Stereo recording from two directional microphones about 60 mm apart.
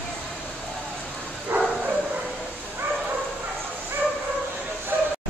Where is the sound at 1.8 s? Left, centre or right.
Right.